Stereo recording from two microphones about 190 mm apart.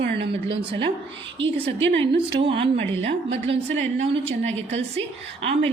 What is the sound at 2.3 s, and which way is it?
A woman's voice, 30° right (ahead or behind).